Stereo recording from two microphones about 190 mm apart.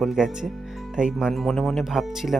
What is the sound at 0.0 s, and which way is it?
Speech, centre (ahead or behind).